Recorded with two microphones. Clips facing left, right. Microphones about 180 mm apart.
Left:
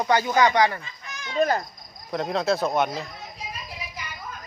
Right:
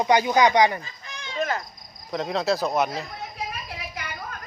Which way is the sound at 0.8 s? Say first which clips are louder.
Even; 35° right (ahead or behind).